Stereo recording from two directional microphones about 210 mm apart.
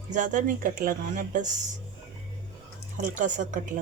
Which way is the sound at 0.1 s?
35° right (ahead or behind).